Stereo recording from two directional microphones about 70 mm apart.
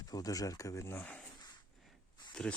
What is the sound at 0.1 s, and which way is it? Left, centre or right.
Speech, left.